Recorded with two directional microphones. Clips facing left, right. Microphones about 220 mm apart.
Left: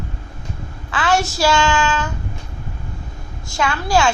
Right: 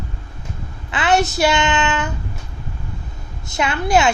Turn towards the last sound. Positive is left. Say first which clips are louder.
# right 1 dB
turn(degrees=-20)  # may be behind; listen again after turning